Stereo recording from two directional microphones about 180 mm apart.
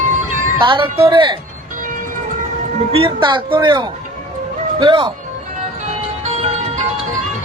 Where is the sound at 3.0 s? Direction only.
25° right (ahead or behind).